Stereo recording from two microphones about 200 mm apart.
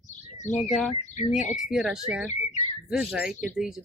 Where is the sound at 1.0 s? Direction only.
35° left (ahead or behind).